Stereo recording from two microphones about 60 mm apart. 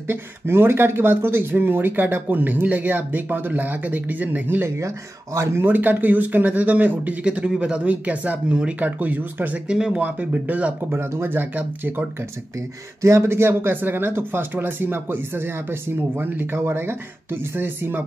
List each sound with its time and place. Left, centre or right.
0.1 s speech: right
4.6 s speech: right
5.7 s speech: right
7.2 s speech: centre
9.7 s speech: centre
10.0 s speech: right
10.9 s speech: right
13.0 s speech: right